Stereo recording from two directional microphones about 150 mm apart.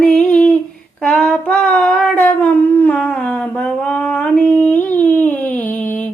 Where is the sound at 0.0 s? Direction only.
10° left (ahead or behind).